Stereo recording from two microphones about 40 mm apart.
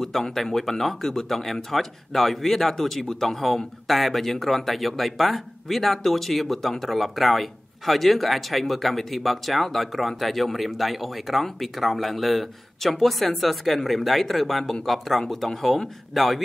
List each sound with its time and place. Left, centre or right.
0.0 s speech: centre